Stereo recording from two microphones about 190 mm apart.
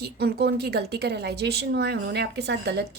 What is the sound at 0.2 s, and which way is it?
Speech, 55° right (ahead or behind).